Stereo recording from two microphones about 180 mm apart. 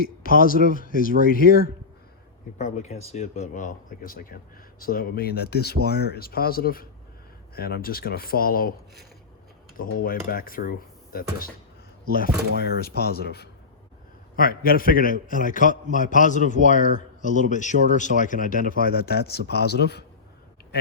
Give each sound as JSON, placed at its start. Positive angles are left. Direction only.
{"t": 0.0, "sound": "a man's voice", "side_deg": 55}
{"t": 2.6, "sound": "a man's voice", "side_deg": 40}
{"t": 9.7, "sound": "a man's voice", "side_deg": 50}
{"t": 12.5, "sound": "a man's voice", "side_deg": 60}
{"t": 18.8, "sound": "speech", "side_deg": 60}